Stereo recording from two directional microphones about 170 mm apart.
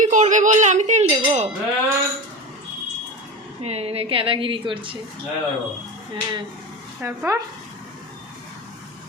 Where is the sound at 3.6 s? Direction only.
40° right (ahead or behind).